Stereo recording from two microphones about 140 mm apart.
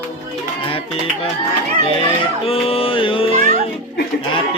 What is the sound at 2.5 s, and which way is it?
Music, 40° left (ahead or behind).